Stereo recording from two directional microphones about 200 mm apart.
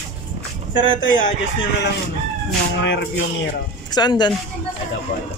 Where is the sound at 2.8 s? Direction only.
60° left (ahead or behind).